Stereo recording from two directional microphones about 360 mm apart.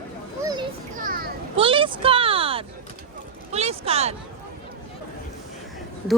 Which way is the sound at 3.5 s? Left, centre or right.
Centre.